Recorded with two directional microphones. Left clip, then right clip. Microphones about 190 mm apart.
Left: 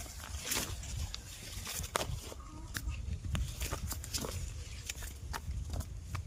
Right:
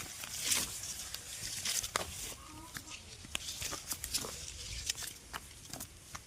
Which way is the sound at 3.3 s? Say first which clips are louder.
Right 2 dB; 50° left (ahead or behind).